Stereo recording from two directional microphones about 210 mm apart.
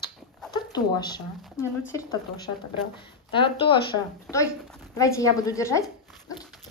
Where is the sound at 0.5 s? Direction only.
20° left (ahead or behind).